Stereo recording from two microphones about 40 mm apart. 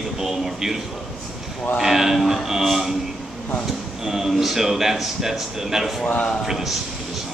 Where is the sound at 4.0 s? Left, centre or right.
Centre.